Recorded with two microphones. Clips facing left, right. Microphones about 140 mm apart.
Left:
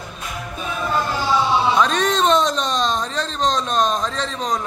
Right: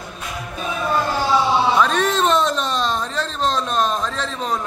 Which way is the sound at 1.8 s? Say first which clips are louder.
Even; 5° right (ahead or behind).